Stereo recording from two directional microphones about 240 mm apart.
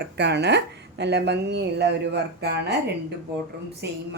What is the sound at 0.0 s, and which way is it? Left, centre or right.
Speech, right.